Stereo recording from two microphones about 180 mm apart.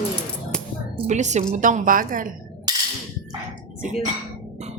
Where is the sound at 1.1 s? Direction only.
40° right (ahead or behind).